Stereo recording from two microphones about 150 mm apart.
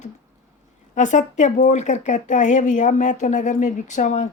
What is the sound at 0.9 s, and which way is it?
Speech, 55° left (ahead or behind).